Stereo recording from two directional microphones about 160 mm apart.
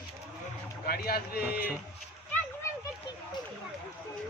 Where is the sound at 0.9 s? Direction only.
70° left (ahead or behind).